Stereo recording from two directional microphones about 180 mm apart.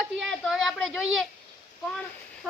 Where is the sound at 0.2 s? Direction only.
Centre (ahead or behind).